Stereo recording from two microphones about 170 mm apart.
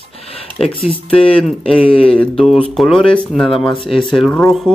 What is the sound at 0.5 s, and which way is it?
Speech, centre (ahead or behind).